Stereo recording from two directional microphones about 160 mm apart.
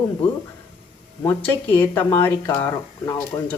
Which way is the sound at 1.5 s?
15° left (ahead or behind).